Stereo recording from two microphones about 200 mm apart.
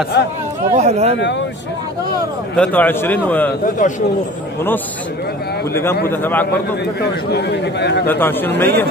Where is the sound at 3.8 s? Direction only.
40° left (ahead or behind).